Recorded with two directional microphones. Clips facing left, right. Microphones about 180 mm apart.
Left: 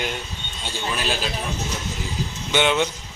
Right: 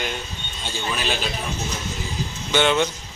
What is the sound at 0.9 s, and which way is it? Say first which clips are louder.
Speech: left 1 dB; 5° left (ahead or behind).